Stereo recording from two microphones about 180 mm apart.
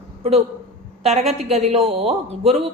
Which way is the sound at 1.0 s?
35° right (ahead or behind).